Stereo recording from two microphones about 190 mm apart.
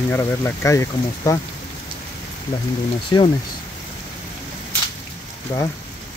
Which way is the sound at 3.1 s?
25° left (ahead or behind).